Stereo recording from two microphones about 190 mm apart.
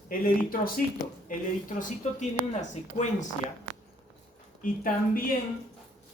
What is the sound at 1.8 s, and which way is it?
Speech, 40° left (ahead or behind).